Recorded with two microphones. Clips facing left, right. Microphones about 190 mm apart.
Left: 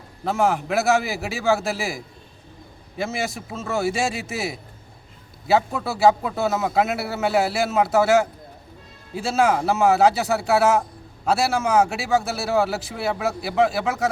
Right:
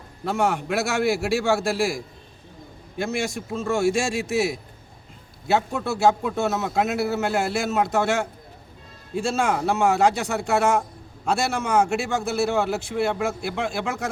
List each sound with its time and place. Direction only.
0.3 s a man's voice: centre (ahead or behind)